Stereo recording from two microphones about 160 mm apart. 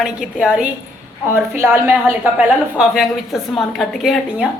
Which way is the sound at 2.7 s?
5° right (ahead or behind).